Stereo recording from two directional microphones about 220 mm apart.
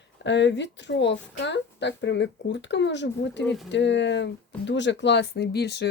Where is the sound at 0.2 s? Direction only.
55° left (ahead or behind).